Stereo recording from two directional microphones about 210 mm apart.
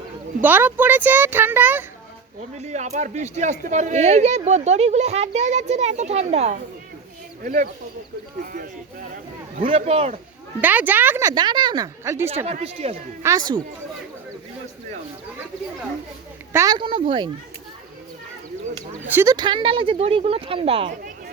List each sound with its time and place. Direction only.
0.4 s speech: 10° right (ahead or behind)
2.6 s speech: 30° right (ahead or behind)
10.6 s speech: 10° right (ahead or behind)
12.5 s speech: 30° right (ahead or behind)
13.2 s speech: 20° right (ahead or behind)
16.5 s speech: 15° right (ahead or behind)
19.1 s speech: 15° right (ahead or behind)